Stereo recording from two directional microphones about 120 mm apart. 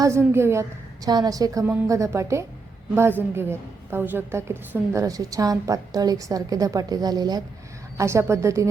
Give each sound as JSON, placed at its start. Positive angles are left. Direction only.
{"t": 0.0, "sound": "a woman's voice", "side_deg": -20}
{"t": 1.0, "sound": "a woman's voice", "side_deg": -35}